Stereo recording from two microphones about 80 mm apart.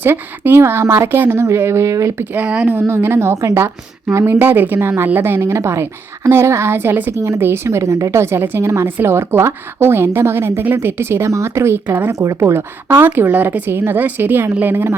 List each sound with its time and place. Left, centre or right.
0.0 s a woman's voice: right
2.3 s a woman's voice: centre
2.7 s a woman's voice: right
12.2 s a woman's voice: right
12.9 s a woman's voice: right